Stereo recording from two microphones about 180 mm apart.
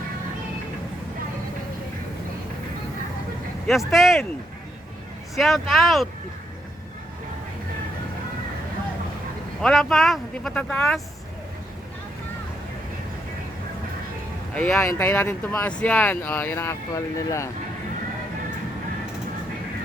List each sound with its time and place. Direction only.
3.7 s speech: centre (ahead or behind)
5.3 s speech: centre (ahead or behind)
9.6 s speech: centre (ahead or behind)
14.5 s speech: 5° left (ahead or behind)